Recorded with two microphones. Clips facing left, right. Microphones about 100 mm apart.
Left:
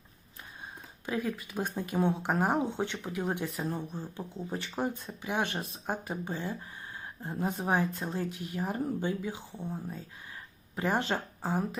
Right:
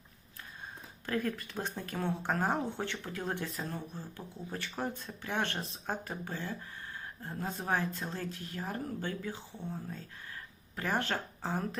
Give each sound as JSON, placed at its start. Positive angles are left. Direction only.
{"t": 1.0, "sound": "speech", "side_deg": 10}